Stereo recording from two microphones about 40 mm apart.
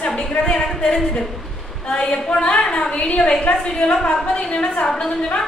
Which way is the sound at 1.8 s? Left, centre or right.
Centre.